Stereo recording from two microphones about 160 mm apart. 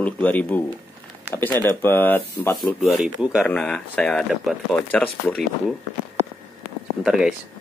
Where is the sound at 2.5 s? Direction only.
Centre (ahead or behind).